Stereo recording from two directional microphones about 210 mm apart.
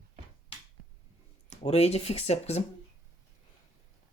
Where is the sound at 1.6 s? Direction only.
30° left (ahead or behind).